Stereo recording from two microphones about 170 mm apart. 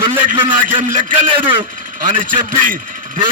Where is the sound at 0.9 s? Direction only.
50° right (ahead or behind).